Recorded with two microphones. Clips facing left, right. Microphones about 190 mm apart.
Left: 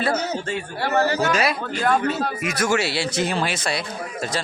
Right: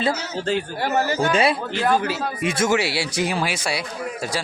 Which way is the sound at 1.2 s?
30° right (ahead or behind).